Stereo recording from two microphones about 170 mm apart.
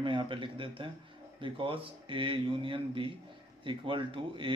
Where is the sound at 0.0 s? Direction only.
30° right (ahead or behind).